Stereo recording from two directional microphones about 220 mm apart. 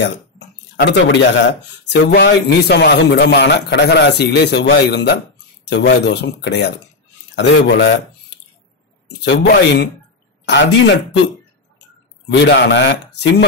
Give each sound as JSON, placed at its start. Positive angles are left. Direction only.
{"t": 0.7, "sound": "speech", "side_deg": 50}
{"t": 9.2, "sound": "speech", "side_deg": 50}
{"t": 12.3, "sound": "speech", "side_deg": 55}